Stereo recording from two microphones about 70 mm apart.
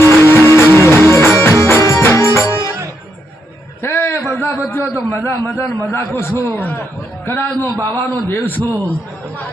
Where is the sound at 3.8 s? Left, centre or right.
Left.